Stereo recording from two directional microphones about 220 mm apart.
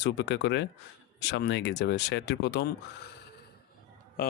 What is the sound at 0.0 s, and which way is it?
Speech, 50° left (ahead or behind).